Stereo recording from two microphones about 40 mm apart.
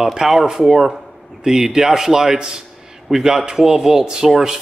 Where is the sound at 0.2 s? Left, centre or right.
Centre.